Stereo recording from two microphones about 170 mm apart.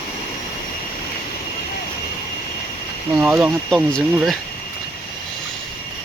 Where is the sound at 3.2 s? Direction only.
5° right (ahead or behind).